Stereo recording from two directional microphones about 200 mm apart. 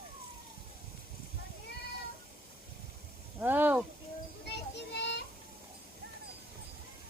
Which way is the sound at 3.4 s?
10° right (ahead or behind).